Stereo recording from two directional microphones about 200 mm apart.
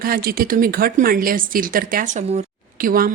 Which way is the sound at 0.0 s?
45° right (ahead or behind).